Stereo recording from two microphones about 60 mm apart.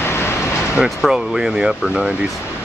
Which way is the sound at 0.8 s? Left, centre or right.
Centre.